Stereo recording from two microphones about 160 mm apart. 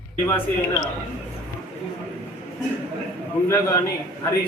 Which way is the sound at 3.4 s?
15° left (ahead or behind).